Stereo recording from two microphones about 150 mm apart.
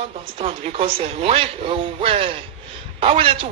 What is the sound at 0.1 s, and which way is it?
A man's voice, 40° right (ahead or behind).